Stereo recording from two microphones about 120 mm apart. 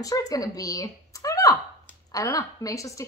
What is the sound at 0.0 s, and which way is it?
A woman's voice, 30° left (ahead or behind).